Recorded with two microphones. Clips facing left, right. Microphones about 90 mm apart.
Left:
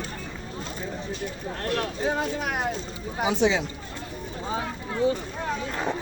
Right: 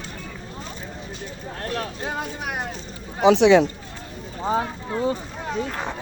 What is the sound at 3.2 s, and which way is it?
Speech, 80° right.